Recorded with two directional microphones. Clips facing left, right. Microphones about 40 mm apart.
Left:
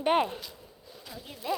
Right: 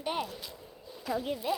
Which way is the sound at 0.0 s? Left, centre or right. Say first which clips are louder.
Left 9 dB; left.